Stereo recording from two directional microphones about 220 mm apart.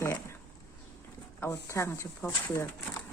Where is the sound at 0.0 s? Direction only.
10° left (ahead or behind).